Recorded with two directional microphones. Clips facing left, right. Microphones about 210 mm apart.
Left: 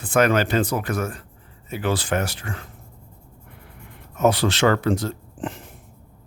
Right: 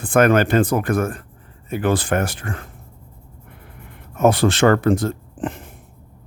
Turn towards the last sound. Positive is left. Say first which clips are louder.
# right 4 dB
turn(degrees=-55)  # may be behind; listen again after turning